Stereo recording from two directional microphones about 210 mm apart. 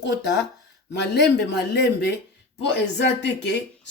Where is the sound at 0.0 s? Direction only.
55° left (ahead or behind).